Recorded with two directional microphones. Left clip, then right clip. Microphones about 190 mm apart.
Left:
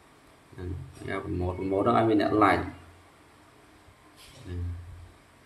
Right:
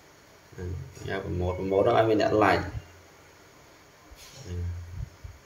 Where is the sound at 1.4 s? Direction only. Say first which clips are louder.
Right 3 dB; 20° left (ahead or behind).